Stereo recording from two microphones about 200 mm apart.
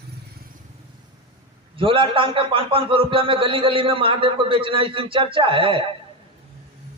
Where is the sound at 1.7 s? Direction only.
25° right (ahead or behind).